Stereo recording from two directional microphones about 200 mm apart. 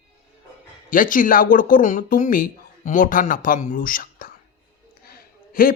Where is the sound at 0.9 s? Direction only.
45° left (ahead or behind).